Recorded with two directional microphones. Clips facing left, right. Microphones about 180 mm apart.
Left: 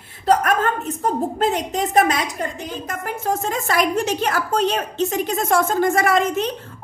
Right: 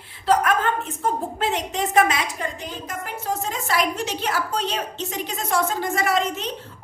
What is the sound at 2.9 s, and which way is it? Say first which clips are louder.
A woman's voice: left 5 dB; 50° left (ahead or behind).